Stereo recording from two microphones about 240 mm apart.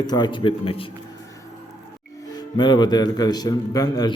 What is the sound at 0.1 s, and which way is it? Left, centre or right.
Speech, centre.